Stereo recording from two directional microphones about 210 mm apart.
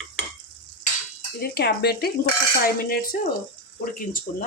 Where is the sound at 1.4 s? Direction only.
50° left (ahead or behind).